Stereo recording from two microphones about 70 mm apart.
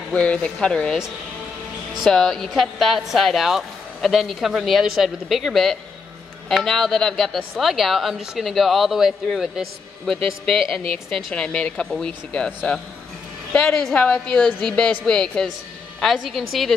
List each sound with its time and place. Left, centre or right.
0.1 s a woman's voice: centre
2.0 s a woman's voice: centre
11.3 s a woman's voice: centre
16.2 s a woman's voice: centre